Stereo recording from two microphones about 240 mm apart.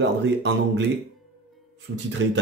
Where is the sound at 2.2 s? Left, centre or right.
Right.